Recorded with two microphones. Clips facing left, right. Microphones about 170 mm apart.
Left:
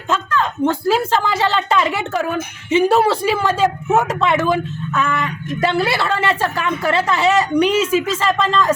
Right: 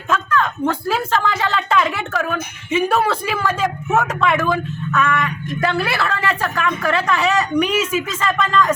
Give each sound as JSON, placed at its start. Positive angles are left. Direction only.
{"t": 0.1, "sound": "speech", "side_deg": 25}